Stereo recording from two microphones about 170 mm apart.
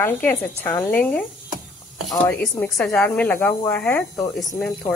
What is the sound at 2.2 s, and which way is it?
Speech, 10° left (ahead or behind).